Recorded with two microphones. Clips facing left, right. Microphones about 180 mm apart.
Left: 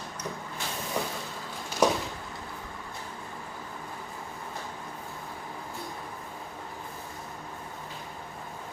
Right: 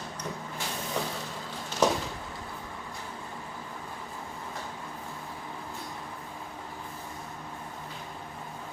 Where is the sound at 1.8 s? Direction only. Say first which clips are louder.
Left 1 dB; 10° left (ahead or behind).